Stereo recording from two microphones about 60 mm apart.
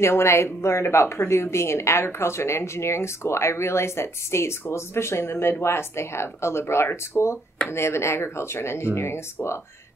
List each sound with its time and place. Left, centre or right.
0.0 s a woman's voice: left